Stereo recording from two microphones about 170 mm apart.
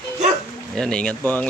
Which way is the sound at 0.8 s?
5° left (ahead or behind).